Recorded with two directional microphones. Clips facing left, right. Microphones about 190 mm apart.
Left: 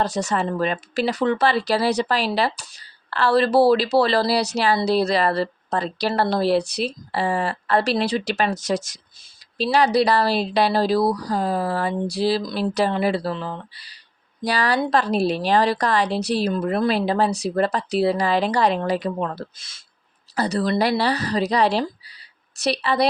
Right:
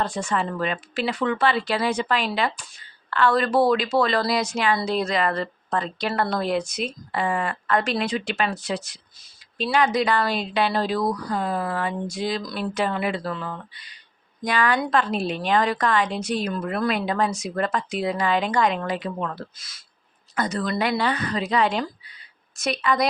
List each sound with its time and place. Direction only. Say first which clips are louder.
0.0 s speech: left 3 dB; 40° left (ahead or behind)
12.7 s speech: left 4 dB; 35° left (ahead or behind)